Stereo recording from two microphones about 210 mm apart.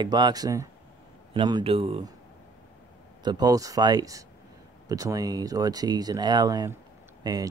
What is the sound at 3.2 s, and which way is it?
Speech, 20° right (ahead or behind).